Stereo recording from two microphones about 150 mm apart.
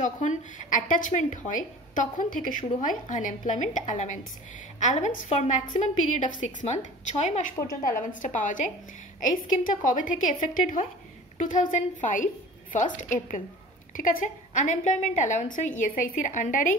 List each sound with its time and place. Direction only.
0.0 s a woman's voice: 55° left (ahead or behind)